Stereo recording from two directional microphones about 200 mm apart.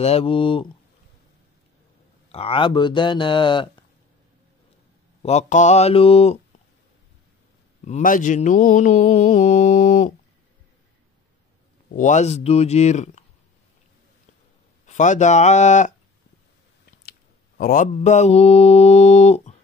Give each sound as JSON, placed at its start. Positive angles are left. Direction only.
{"t": 0.0, "sound": "speech", "side_deg": 30}
{"t": 2.3, "sound": "speech", "side_deg": 25}
{"t": 5.2, "sound": "mantra", "side_deg": 35}
{"t": 7.8, "sound": "mantra", "side_deg": 40}
{"t": 11.9, "sound": "mantra", "side_deg": 40}
{"t": 14.9, "sound": "mantra", "side_deg": 35}
{"t": 17.6, "sound": "mantra", "side_deg": 45}